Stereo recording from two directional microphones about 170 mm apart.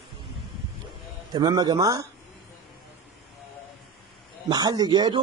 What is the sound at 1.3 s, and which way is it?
Speech, 25° right (ahead or behind).